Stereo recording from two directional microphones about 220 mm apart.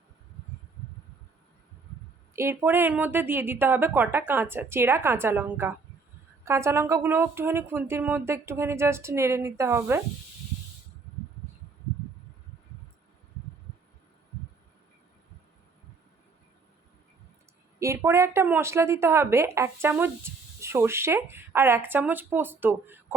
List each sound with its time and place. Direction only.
2.3 s a woman's voice: 10° right (ahead or behind)
17.7 s a woman's voice: 10° right (ahead or behind)